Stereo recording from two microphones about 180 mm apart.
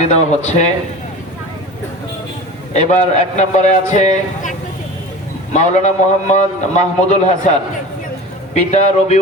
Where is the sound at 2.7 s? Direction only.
40° left (ahead or behind).